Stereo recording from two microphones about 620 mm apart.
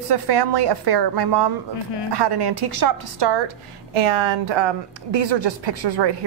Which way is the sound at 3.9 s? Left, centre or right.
Right.